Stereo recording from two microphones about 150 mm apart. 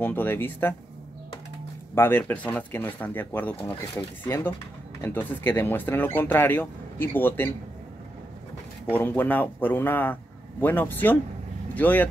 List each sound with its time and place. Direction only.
0.0 s speech: 10° left (ahead or behind)
2.0 s speech: 10° left (ahead or behind)
8.9 s speech: 10° left (ahead or behind)